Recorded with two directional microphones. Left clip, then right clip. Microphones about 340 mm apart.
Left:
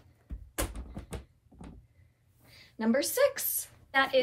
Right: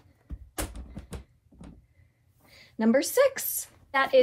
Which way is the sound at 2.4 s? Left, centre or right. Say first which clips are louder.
Right 5 dB; centre.